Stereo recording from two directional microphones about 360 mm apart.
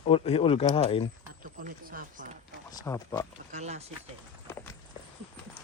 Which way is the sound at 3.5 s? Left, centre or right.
Centre.